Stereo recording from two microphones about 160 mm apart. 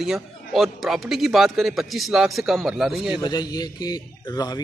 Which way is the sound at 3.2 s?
25° left (ahead or behind).